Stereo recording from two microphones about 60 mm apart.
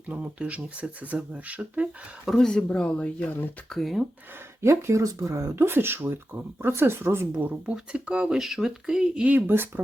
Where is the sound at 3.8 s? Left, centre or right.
Centre.